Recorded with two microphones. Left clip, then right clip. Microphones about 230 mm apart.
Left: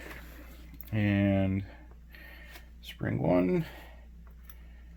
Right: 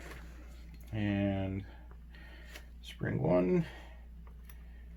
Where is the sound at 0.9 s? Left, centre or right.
Left.